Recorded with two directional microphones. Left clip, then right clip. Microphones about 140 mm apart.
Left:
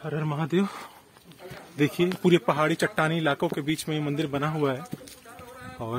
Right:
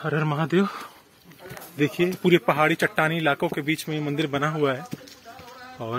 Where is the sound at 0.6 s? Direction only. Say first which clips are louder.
Right 4 dB; 5° left (ahead or behind).